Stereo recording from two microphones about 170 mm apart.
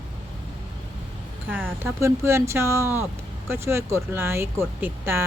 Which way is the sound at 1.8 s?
15° right (ahead or behind).